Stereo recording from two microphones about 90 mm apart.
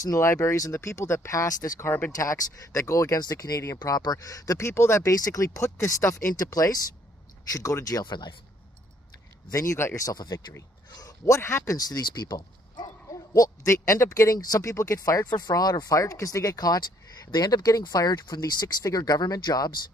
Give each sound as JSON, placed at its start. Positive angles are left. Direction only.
{"t": 0.0, "sound": "speech", "side_deg": 35}
{"t": 1.8, "sound": "speech", "side_deg": 25}
{"t": 2.1, "sound": "speech", "side_deg": 35}
{"t": 8.0, "sound": "speech", "side_deg": 60}
{"t": 9.5, "sound": "speech", "side_deg": 35}
{"t": 11.3, "sound": "speech", "side_deg": 30}
{"t": 15.3, "sound": "speech", "side_deg": 50}